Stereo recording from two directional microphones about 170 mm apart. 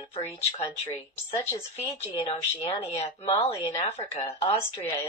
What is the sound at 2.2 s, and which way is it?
Speech, 35° left (ahead or behind).